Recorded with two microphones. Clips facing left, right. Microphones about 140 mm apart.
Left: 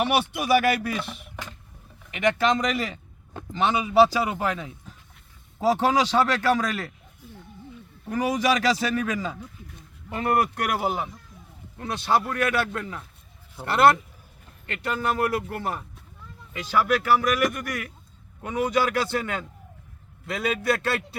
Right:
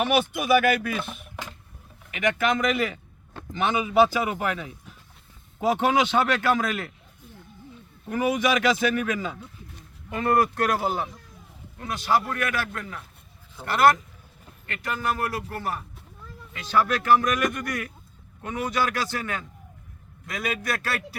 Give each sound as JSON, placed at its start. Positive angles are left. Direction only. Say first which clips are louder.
{"t": 0.1, "sound": "speech", "louder": "right 1 dB", "side_deg": 30}
{"t": 2.0, "sound": "speech", "louder": "left 2 dB", "side_deg": 30}
{"t": 8.1, "sound": "a man's voice", "louder": "even", "side_deg": 40}
{"t": 11.9, "sound": "a man's voice", "louder": "even", "side_deg": 30}
{"t": 16.5, "sound": "speech", "louder": "left 1 dB", "side_deg": 10}
{"t": 18.4, "sound": "a man's voice", "louder": "left 3 dB", "side_deg": 15}